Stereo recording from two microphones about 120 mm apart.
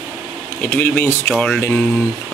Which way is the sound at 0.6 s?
15° left (ahead or behind).